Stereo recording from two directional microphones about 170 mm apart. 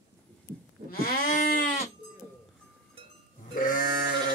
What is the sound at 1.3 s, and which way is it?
Sheep, 50° left (ahead or behind).